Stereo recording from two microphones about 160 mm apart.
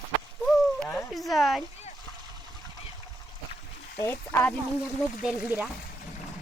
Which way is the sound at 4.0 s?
15° left (ahead or behind).